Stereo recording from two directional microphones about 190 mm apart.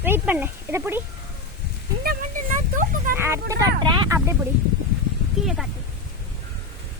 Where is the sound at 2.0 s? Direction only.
50° right (ahead or behind).